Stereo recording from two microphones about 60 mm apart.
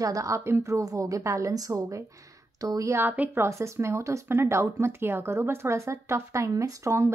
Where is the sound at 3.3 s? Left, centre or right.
Right.